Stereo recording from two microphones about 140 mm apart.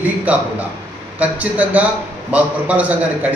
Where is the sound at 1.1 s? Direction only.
10° right (ahead or behind).